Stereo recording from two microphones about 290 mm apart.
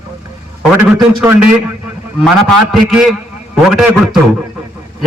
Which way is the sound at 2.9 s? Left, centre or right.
Centre.